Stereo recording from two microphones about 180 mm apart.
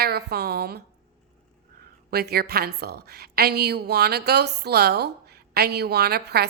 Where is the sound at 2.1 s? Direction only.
60° right (ahead or behind).